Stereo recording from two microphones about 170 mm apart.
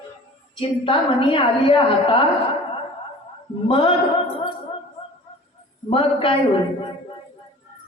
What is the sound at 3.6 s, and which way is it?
Speech, 30° left (ahead or behind).